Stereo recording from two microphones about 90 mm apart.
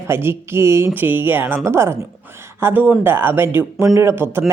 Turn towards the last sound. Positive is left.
turn(degrees=-25)  # may be behind; listen again after turning